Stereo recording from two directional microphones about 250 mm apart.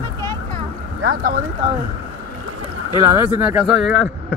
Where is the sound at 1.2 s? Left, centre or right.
Right.